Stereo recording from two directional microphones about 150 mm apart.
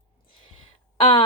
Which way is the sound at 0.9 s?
35° left (ahead or behind).